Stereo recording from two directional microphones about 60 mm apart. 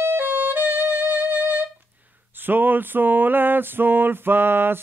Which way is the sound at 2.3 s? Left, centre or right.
Right.